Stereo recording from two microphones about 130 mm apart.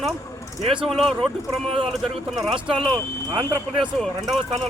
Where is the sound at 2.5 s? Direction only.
45° right (ahead or behind).